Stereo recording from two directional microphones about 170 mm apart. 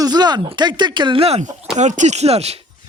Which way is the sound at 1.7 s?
45° right (ahead or behind).